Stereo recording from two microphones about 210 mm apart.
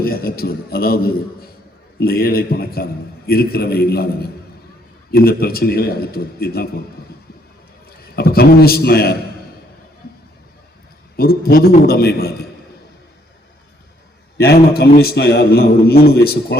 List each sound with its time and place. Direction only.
0.0 s a man's voice: 45° left (ahead or behind)
7.9 s a man's voice: 50° left (ahead or behind)
11.2 s a man's voice: 45° left (ahead or behind)
14.3 s a man's voice: 50° left (ahead or behind)